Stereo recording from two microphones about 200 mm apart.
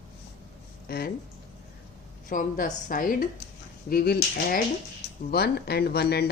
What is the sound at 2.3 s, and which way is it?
Speech, 40° left (ahead or behind).